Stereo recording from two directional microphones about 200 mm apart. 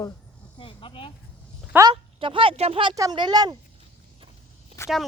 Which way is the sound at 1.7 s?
20° right (ahead or behind).